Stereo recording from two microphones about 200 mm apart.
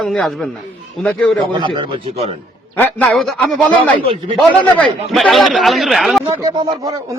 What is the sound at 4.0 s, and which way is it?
Speech, 25° right (ahead or behind).